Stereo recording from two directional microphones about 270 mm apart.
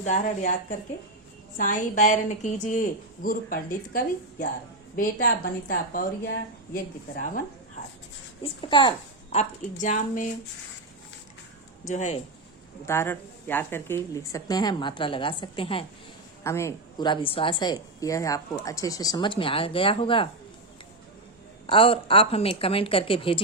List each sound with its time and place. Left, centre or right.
0.0 s a woman's voice: left
1.5 s a woman's voice: left
8.6 s a woman's voice: centre
11.9 s a woman's voice: left
12.8 s a woman's voice: centre
21.7 s a woman's voice: centre